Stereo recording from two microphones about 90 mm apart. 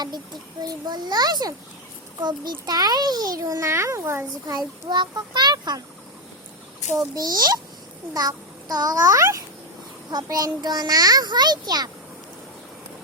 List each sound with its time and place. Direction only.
0.6 s a child's voice: 50° right (ahead or behind); by 4.5 s 30° right (ahead or behind)
4.5 s a child's voice: 50° right (ahead or behind)
6.9 s a child's voice: 45° right (ahead or behind)
10.1 s a child's voice: 45° right (ahead or behind)